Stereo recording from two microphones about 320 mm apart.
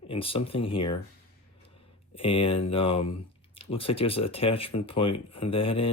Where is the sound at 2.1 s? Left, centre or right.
Centre.